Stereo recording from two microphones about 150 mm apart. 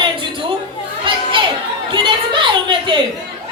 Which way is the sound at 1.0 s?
35° right (ahead or behind).